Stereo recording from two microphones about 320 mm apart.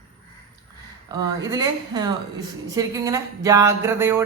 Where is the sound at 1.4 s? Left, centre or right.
Centre.